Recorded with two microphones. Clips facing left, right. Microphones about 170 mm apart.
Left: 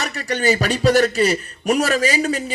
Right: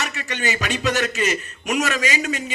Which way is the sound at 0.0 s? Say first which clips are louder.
Left 6 dB; 40° left (ahead or behind).